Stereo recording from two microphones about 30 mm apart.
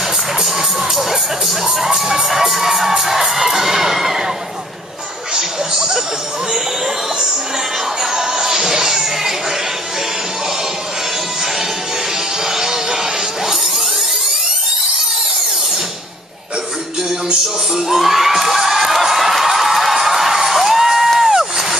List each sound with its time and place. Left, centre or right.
0.4 s music: centre
3.1 s children shouting: centre
5.3 s music: right
8.0 s music: centre
12.4 s music: centre
17.7 s a sound: centre